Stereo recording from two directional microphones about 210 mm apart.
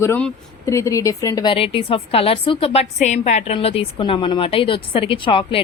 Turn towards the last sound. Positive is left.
turn(degrees=25)  # may be behind; listen again after turning